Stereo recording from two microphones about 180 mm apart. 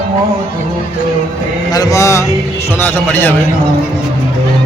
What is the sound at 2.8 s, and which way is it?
Speech, 10° left (ahead or behind).